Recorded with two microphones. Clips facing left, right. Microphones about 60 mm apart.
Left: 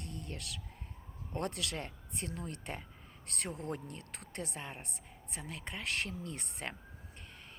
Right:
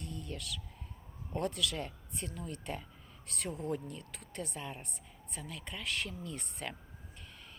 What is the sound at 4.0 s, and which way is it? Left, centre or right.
Speech, left.